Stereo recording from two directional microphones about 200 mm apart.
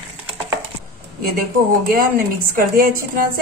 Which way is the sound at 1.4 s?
45° right (ahead or behind).